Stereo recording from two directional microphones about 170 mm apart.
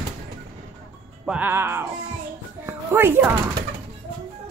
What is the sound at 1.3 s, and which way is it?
Speech, 10° right (ahead or behind).